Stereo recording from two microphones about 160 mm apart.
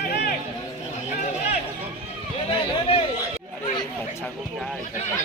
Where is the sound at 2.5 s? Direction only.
35° left (ahead or behind).